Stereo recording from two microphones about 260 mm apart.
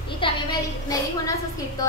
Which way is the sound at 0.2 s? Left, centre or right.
Centre.